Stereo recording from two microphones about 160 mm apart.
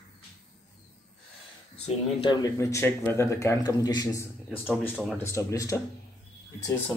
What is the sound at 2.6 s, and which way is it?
A man's voice, 15° left (ahead or behind).